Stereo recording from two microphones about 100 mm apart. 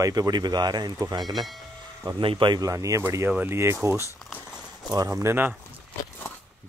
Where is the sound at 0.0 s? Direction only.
40° right (ahead or behind).